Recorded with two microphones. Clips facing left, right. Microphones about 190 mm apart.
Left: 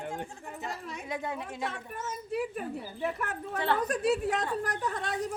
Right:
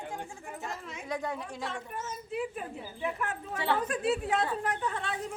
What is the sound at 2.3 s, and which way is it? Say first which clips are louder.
A woman's voice: left 3 dB; 40° left (ahead or behind).